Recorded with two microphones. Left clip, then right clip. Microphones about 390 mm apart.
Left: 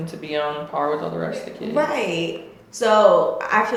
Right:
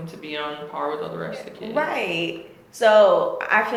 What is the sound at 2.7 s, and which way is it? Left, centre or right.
Speech, centre.